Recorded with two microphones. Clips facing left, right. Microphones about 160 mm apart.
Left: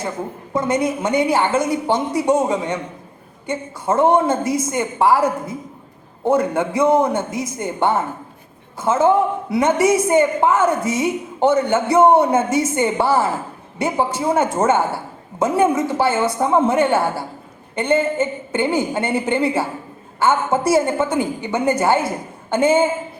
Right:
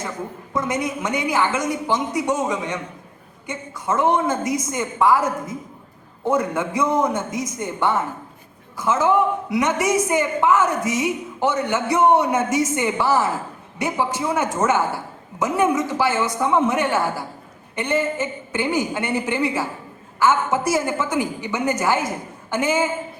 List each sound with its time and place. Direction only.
0.5 s a woman's voice: 30° left (ahead or behind)
6.2 s a man's voice: 30° left (ahead or behind)